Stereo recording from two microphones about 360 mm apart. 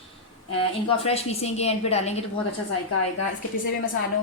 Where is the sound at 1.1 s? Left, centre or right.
Centre.